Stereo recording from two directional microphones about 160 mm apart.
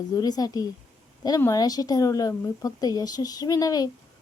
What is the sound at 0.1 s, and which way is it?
Speech, 25° left (ahead or behind).